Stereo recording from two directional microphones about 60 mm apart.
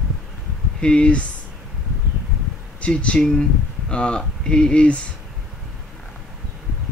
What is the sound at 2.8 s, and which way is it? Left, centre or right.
Speech, centre.